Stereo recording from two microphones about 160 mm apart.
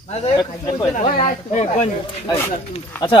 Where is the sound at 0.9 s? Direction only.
45° left (ahead or behind).